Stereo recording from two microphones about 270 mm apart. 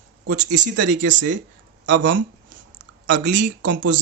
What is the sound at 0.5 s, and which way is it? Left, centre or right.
Speech, right.